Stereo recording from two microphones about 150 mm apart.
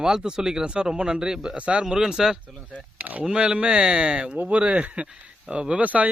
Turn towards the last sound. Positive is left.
turn(degrees=-10)  # may be behind; listen again after turning